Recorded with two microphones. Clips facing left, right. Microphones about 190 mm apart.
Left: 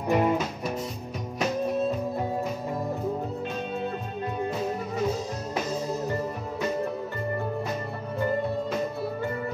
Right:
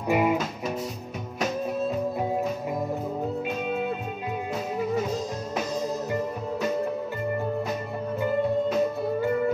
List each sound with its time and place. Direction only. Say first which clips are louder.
0.1 s music: even; 10° right (ahead or behind)